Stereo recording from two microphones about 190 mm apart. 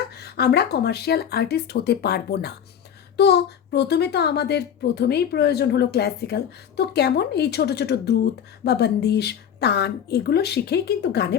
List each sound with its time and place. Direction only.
0.2 s speech: 55° left (ahead or behind)